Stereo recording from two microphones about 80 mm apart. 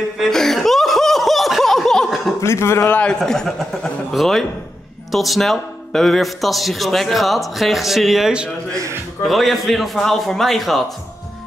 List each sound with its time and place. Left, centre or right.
0.3 s chuckle: centre
2.4 s a man's voice: left
3.0 s a man's voice: centre